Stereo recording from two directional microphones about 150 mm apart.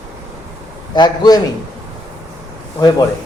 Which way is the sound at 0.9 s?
30° left (ahead or behind).